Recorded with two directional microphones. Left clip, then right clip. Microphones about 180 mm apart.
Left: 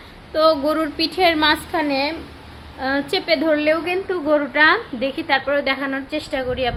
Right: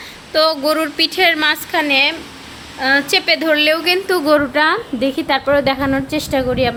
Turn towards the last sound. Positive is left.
turn(degrees=-25)  # may be behind; listen again after turning